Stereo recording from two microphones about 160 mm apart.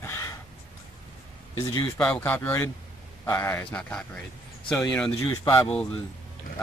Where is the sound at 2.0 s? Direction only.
10° left (ahead or behind).